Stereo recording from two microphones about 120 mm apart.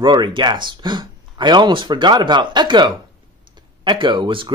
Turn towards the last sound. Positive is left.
turn(degrees=-45)  # may be behind; listen again after turning